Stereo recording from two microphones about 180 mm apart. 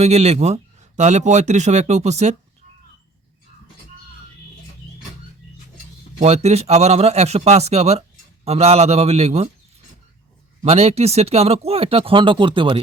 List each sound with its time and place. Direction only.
0.0 s speech: 35° right (ahead or behind)
6.1 s speech: 35° right (ahead or behind)
10.6 s speech: 35° right (ahead or behind)